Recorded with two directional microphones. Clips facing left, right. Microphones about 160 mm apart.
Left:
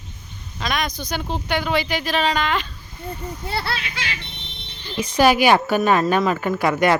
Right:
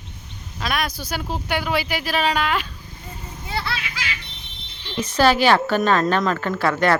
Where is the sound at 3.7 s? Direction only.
30° left (ahead or behind).